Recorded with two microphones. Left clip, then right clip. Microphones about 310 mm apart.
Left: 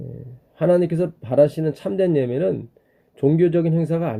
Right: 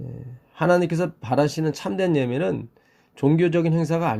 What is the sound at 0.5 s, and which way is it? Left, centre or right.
Speech, centre.